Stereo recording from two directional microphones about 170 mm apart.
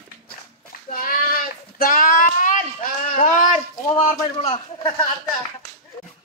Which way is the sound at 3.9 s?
35° left (ahead or behind).